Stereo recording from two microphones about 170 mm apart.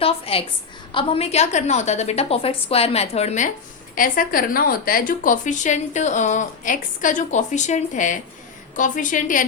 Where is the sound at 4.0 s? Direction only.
55° left (ahead or behind).